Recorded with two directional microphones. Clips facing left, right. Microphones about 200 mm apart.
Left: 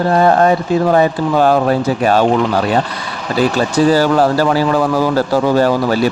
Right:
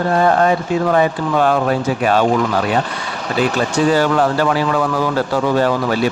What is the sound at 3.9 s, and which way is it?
Speech, 35° left (ahead or behind).